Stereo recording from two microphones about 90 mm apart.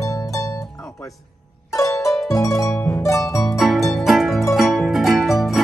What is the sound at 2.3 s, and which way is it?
Harp, 35° left (ahead or behind).